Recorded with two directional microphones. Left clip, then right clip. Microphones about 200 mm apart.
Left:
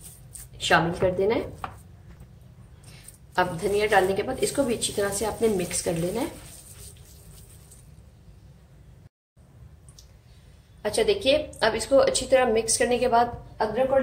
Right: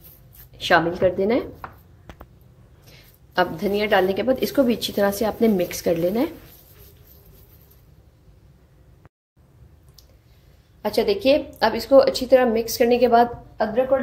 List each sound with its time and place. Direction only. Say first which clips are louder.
0.6 s a woman's voice: right 4 dB; 45° right (ahead or behind)
2.9 s a woman's voice: right 4 dB; 45° right (ahead or behind)
10.8 s a woman's voice: right 3 dB; 30° right (ahead or behind)